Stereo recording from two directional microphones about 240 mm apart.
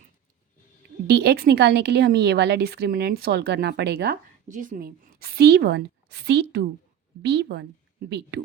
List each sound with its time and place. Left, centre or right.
1.0 s a woman's voice: right